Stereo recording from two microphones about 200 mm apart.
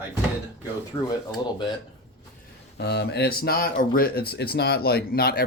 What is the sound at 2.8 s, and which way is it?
Speech, 55° left (ahead or behind).